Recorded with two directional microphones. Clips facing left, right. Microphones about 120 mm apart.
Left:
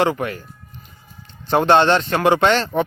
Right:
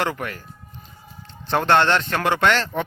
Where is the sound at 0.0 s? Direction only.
20° left (ahead or behind).